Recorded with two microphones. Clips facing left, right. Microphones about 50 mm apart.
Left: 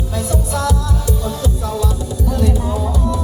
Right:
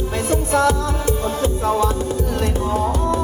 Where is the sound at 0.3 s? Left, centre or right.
Right.